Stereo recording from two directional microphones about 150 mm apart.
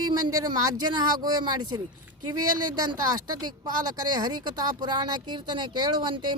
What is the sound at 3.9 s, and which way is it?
Speech, 25° right (ahead or behind).